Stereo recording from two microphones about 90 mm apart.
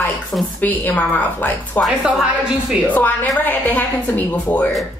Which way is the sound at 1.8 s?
5° right (ahead or behind).